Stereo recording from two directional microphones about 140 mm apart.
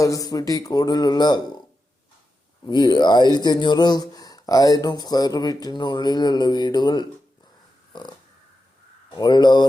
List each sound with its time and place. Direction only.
0.0 s speech: 25° left (ahead or behind)
2.6 s speech: 30° left (ahead or behind)
9.0 s speech: 30° left (ahead or behind)